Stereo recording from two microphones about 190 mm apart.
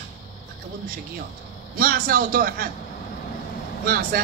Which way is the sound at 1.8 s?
50° right (ahead or behind).